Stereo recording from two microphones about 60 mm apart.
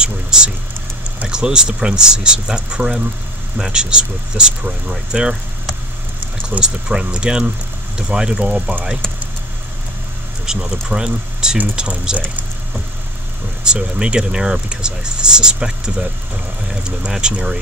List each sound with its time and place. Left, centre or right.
0.0 s vehicle: centre
1.3 s speech: centre
6.6 s speech: centre
10.4 s speech: centre
11.5 s speech: right
11.8 s speech: centre
13.7 s speech: centre